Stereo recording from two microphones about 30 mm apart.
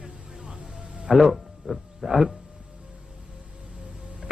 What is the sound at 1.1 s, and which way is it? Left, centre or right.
A man's voice, centre.